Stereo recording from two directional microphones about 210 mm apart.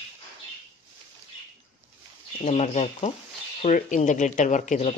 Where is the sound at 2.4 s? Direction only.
30° left (ahead or behind).